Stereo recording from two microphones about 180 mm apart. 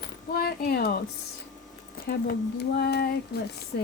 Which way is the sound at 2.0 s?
60° left (ahead or behind).